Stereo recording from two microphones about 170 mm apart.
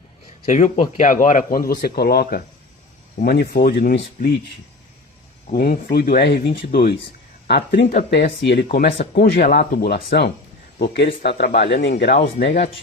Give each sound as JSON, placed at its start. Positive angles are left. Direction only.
{"t": 0.4, "sound": "a man's voice", "side_deg": 45}
{"t": 5.5, "sound": "speech", "side_deg": 55}
{"t": 7.9, "sound": "speech", "side_deg": 75}
{"t": 9.0, "sound": "speech", "side_deg": 90}
{"t": 11.7, "sound": "speech", "side_deg": 90}